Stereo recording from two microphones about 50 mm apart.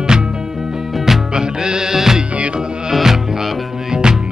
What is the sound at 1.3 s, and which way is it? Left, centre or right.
Music, centre.